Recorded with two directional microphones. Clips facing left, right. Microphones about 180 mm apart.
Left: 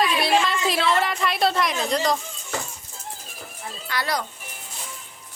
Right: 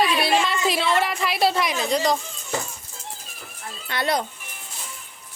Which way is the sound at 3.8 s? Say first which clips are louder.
Right 3 dB; 25° right (ahead or behind).